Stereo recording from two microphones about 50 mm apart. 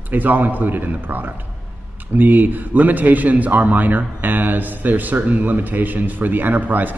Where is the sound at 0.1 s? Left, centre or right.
Right.